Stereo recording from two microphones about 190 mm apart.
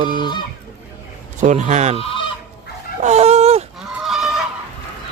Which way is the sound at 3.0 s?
35° right (ahead or behind).